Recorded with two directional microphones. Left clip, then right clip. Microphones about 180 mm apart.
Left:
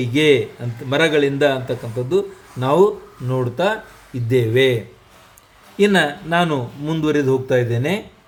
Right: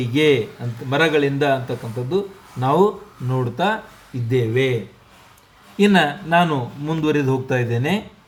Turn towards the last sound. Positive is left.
turn(degrees=15)  # may be behind; listen again after turning